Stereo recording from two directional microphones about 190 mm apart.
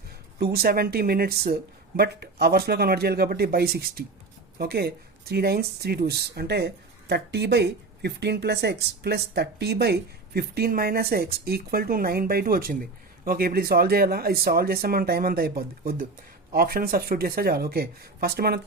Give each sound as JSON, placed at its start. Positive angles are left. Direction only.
{"t": 0.3, "sound": "speech", "side_deg": -55}